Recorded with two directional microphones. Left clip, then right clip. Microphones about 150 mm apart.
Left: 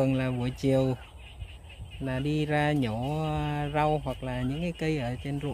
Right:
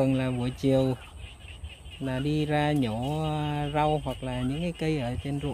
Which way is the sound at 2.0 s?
15° left (ahead or behind).